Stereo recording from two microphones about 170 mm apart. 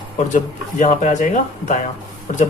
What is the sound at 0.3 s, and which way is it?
Speech, 45° left (ahead or behind).